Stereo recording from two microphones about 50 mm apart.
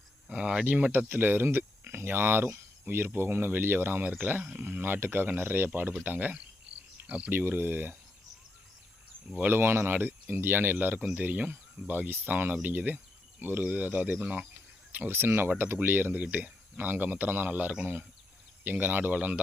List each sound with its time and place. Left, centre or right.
0.3 s speech: right
1.0 s speech: right
6.7 s insect: right
7.3 s speech: right
9.4 s speech: right
15.0 s speech: right